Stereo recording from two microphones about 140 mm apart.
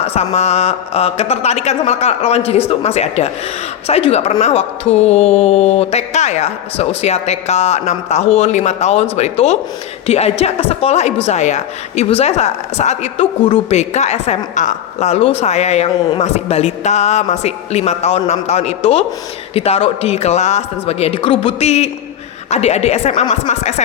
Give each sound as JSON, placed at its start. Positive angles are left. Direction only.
{"t": 0.0, "sound": "a woman's voice", "side_deg": 50}